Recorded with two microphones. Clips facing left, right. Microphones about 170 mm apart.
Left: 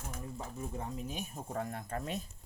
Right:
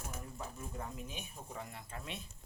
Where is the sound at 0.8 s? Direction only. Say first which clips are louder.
Left 4 dB; 35° left (ahead or behind).